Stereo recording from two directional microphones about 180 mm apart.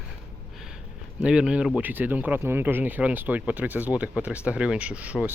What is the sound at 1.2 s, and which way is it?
Speech, 5° right (ahead or behind).